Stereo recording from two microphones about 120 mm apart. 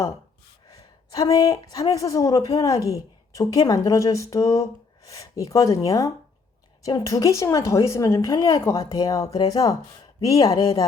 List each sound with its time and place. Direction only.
0.7 s a woman's voice: 30° left (ahead or behind)